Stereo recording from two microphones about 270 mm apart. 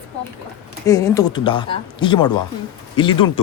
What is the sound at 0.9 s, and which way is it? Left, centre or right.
Speech, centre.